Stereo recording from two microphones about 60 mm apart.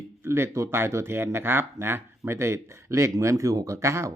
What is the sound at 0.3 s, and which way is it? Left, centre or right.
Speech, right.